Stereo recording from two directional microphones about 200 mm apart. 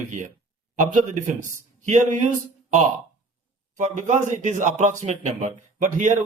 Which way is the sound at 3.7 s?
40° right (ahead or behind).